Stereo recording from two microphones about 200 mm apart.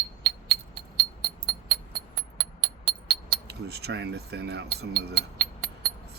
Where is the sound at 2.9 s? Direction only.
55° right (ahead or behind).